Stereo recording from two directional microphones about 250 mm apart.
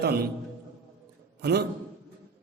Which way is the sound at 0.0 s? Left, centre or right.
Right.